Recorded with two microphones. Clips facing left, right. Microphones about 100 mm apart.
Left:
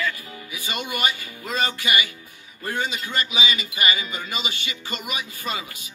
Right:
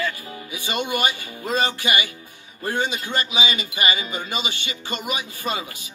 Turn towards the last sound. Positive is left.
turn(degrees=-30)  # may be behind; listen again after turning